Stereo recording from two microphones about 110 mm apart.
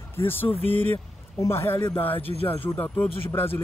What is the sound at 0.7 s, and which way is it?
Speech, 20° left (ahead or behind).